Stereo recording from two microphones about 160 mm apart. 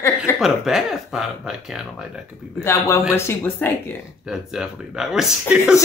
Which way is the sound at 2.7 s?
20° left (ahead or behind).